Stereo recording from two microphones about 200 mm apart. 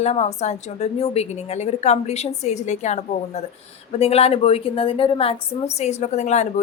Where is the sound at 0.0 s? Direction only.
30° left (ahead or behind).